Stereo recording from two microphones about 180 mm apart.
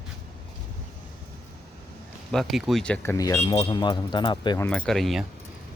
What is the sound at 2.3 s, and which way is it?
Speech, centre (ahead or behind).